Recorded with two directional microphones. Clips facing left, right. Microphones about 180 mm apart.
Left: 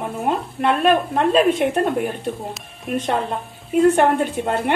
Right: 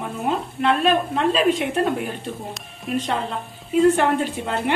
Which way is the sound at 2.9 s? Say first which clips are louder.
Left 3 dB; 55° left (ahead or behind).